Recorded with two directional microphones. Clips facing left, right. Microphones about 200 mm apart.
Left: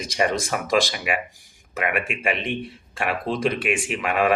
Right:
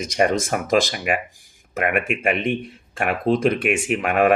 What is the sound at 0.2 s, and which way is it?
Speech, 45° right (ahead or behind).